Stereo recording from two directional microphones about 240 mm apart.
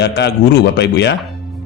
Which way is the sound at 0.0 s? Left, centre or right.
Left.